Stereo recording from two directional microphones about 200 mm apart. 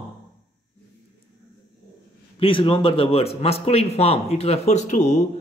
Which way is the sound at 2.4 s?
25° left (ahead or behind).